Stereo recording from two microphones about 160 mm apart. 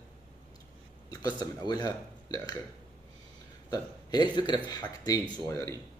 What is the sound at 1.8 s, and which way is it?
Speech, 25° left (ahead or behind).